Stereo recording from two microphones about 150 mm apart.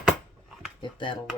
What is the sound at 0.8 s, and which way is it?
Speech, 35° left (ahead or behind).